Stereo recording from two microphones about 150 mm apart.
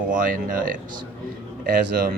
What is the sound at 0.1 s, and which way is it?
Speech, 65° right (ahead or behind).